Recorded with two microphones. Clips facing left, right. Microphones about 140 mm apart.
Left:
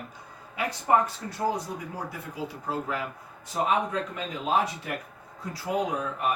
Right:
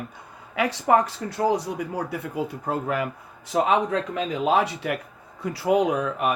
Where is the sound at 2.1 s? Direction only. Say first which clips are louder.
Right 7 dB; 60° right (ahead or behind).